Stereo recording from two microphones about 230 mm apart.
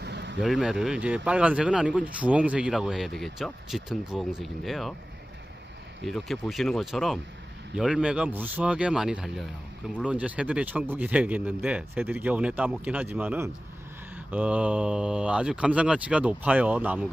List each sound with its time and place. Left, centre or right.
0.0 s vehicle: right
0.4 s speech: centre
6.0 s speech: centre